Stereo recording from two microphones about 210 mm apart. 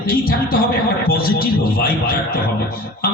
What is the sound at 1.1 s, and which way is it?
A man's voice, 45° left (ahead or behind).